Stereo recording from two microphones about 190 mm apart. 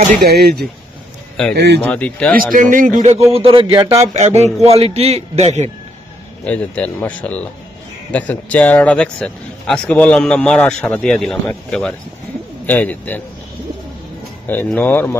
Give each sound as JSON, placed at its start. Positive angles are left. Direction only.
{"t": 0.2, "sound": "speech", "side_deg": -55}
{"t": 1.8, "sound": "speech", "side_deg": 5}
{"t": 2.3, "sound": "speech", "side_deg": -45}
{"t": 3.3, "sound": "speech", "side_deg": -25}
{"t": 4.1, "sound": "a man's voice", "side_deg": -35}
{"t": 6.4, "sound": "a man's voice", "side_deg": 5}
{"t": 14.5, "sound": "speech", "side_deg": 10}